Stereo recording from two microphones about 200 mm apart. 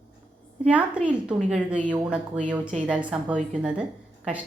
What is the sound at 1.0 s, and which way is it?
Speech, 30° right (ahead or behind).